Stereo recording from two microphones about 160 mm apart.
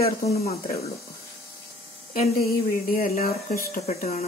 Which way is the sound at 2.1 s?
65° left (ahead or behind).